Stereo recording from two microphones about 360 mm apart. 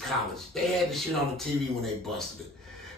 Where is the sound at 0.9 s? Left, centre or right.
Centre.